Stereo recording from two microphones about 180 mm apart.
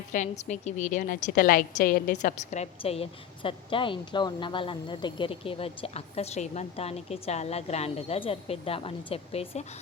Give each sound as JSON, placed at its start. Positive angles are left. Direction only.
{"t": 0.1, "sound": "a woman's voice", "side_deg": 40}